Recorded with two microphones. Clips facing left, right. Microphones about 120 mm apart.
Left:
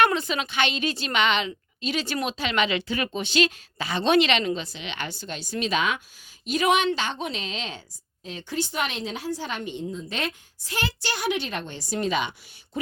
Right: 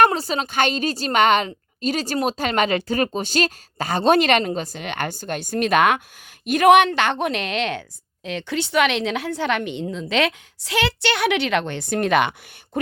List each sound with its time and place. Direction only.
0.0 s a woman's voice: 35° right (ahead or behind); by 12.3 s 65° right (ahead or behind)
12.7 s speech: 50° right (ahead or behind)